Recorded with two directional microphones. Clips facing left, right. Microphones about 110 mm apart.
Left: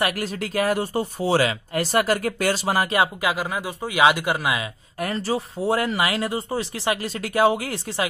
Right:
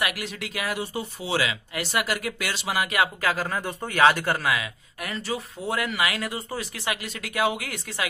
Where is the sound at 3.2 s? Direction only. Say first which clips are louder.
Left 2 dB; 15° left (ahead or behind).